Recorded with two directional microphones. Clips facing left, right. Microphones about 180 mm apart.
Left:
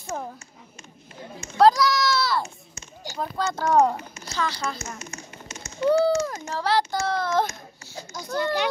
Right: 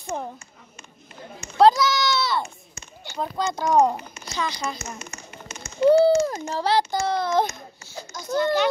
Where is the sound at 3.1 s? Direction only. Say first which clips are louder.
Right 1 dB; 15° right (ahead or behind).